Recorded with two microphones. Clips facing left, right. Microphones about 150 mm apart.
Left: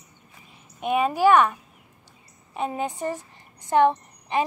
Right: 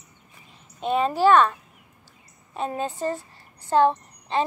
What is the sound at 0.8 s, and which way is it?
A woman's voice, 15° left (ahead or behind).